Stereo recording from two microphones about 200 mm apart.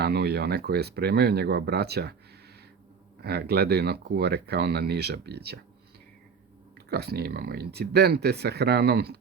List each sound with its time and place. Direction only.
0.0 s speech: 55° right (ahead or behind)
3.2 s speech: 55° right (ahead or behind)
6.7 s speech: 55° right (ahead or behind)